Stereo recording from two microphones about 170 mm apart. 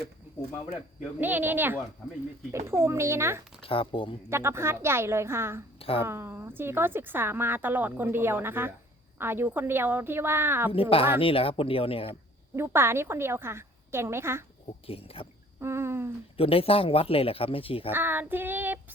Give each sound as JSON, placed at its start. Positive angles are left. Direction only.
{"t": 1.2, "sound": "speech", "side_deg": -10}
{"t": 3.6, "sound": "speech", "side_deg": 30}
{"t": 4.3, "sound": "speech", "side_deg": -15}
{"t": 5.8, "sound": "speech", "side_deg": 35}
{"t": 6.1, "sound": "speech", "side_deg": -15}
{"t": 10.7, "sound": "speech", "side_deg": 35}
{"t": 12.5, "sound": "speech", "side_deg": -15}
{"t": 14.8, "sound": "speech", "side_deg": 35}
{"t": 15.6, "sound": "a sound", "side_deg": -15}
{"t": 16.4, "sound": "speech", "side_deg": 35}
{"t": 17.9, "sound": "speech", "side_deg": -10}